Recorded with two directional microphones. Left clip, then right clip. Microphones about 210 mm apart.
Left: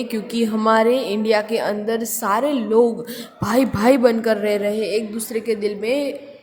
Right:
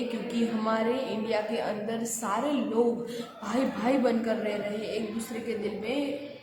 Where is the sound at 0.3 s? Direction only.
45° left (ahead or behind).